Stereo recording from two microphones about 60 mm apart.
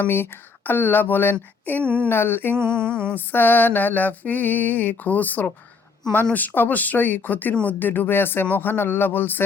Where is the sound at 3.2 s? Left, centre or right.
Left.